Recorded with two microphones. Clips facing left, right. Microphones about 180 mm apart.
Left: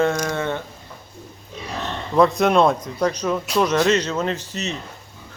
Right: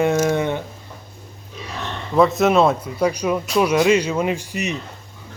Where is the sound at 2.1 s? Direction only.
Centre (ahead or behind).